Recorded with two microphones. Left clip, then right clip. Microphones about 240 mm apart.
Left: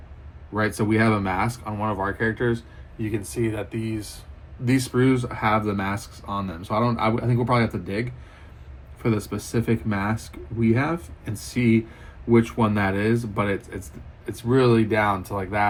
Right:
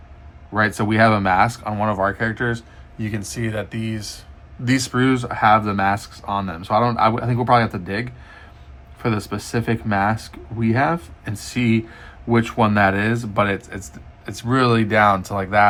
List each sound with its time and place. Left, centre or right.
0.8 s speech: right